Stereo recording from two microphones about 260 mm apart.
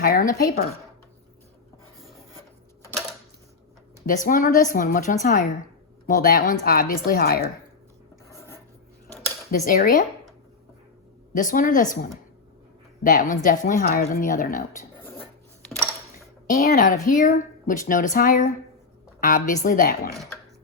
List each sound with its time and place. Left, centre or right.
0.0 s a woman's voice: left
4.0 s speech: left
8.3 s filing: centre
9.5 s speech: left
11.3 s speech: left
13.0 s speech: left
16.5 s speech: left